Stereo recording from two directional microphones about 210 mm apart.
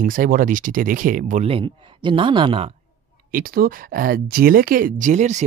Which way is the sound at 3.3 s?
45° right (ahead or behind).